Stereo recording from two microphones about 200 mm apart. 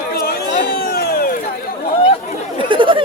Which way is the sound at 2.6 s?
25° right (ahead or behind).